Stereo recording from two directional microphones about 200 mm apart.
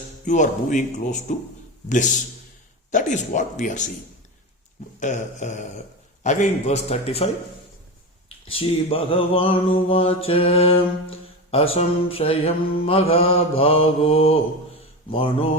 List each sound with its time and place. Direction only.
0.3 s speech: 40° left (ahead or behind)
4.9 s speech: 35° left (ahead or behind)
8.4 s mantra: 25° left (ahead or behind)